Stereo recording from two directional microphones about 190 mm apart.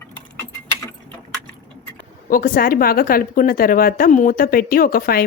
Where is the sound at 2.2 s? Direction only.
45° left (ahead or behind).